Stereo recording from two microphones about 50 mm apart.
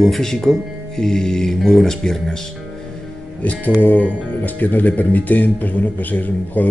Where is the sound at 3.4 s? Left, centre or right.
Left.